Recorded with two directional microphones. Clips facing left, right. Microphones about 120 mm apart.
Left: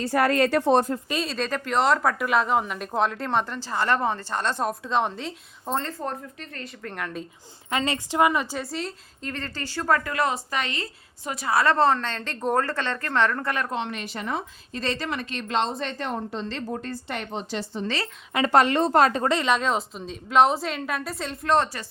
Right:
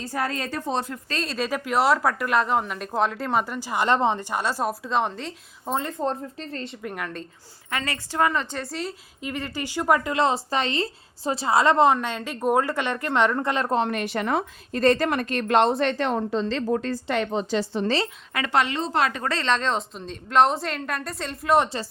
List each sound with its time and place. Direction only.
0.0 s speech: 70° left (ahead or behind)
1.2 s a woman's voice: centre (ahead or behind)
6.0 s speech: 30° right (ahead or behind)
6.8 s a woman's voice: 5° right (ahead or behind)
7.7 s a woman's voice: 20° left (ahead or behind); by 13.7 s 20° right (ahead or behind)
13.7 s speech: 45° right (ahead or behind)
14.0 s a woman's voice: 65° right (ahead or behind); by 16.1 s 80° right
16.7 s a woman's voice: 90° right
18.4 s speech: 40° left (ahead or behind)
19.2 s a woman's voice: 15° left (ahead or behind)